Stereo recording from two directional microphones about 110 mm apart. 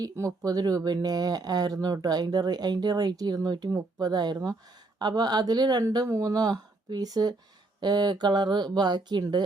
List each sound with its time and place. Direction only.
0.0 s speech: 30° right (ahead or behind)